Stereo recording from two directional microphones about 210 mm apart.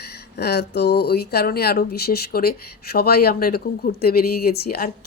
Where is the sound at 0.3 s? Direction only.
50° left (ahead or behind).